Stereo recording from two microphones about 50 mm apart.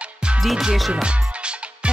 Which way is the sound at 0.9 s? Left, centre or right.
Right.